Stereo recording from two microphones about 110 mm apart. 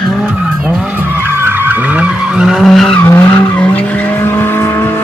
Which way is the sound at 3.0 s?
20° left (ahead or behind).